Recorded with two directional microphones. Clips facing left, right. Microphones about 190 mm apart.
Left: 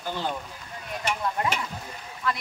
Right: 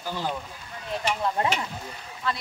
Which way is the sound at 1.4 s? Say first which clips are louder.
Right 2 dB; 25° right (ahead or behind).